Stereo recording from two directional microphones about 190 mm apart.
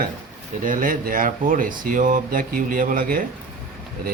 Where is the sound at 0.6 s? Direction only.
45° right (ahead or behind).